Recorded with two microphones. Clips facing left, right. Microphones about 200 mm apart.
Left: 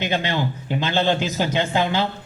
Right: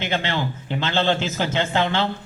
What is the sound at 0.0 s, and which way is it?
A man's voice, 15° left (ahead or behind).